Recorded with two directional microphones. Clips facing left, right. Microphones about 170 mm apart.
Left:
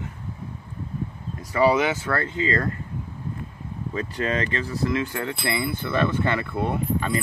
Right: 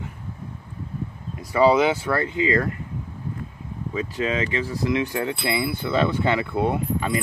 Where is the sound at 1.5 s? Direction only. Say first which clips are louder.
Right 3 dB; 15° right (ahead or behind).